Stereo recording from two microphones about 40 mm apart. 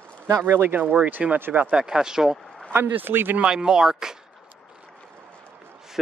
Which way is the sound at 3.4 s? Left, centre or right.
Centre.